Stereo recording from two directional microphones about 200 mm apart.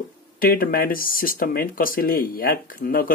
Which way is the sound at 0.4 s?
45° left (ahead or behind).